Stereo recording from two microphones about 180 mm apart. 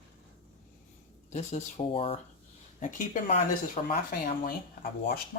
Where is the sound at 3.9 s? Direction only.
55° left (ahead or behind).